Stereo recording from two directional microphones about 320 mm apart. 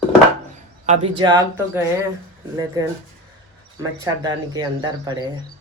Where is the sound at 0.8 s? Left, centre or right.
Centre.